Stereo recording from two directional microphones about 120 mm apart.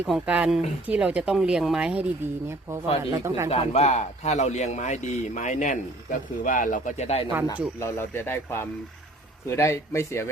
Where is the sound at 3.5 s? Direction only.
65° left (ahead or behind).